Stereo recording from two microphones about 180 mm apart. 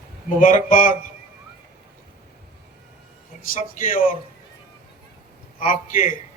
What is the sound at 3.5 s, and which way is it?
Speech, 50° left (ahead or behind).